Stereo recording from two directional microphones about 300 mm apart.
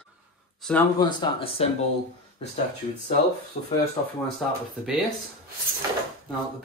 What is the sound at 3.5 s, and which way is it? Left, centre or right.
Speech, left.